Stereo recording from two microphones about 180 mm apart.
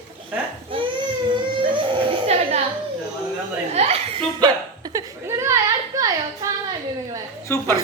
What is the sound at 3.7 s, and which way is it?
Chuckle, 35° right (ahead or behind).